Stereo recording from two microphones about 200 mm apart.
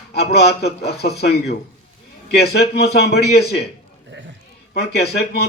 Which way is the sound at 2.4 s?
55° left (ahead or behind).